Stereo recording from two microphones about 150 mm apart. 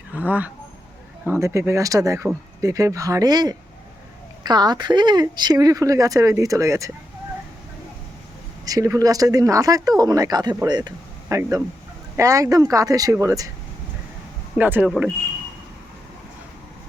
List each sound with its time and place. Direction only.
0.1 s speech: 10° right (ahead or behind)
8.6 s speech: 20° right (ahead or behind)
14.6 s speech: 10° right (ahead or behind)
14.8 s speech: centre (ahead or behind)